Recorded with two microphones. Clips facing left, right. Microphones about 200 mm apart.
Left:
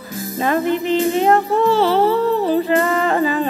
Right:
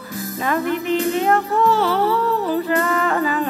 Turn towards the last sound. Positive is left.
turn(degrees=25)  # may be behind; listen again after turning